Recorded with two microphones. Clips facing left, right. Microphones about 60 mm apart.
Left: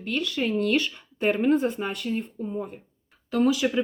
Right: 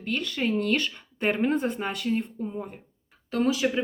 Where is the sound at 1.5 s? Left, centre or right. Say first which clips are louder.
Left 2 dB; right.